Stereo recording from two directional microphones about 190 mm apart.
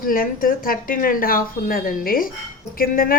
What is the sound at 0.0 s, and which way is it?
A woman's voice, 50° left (ahead or behind).